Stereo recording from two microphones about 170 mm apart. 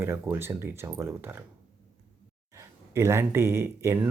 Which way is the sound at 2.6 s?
15° right (ahead or behind).